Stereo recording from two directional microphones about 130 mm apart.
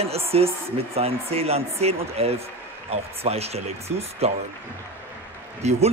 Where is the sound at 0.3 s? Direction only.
50° right (ahead or behind).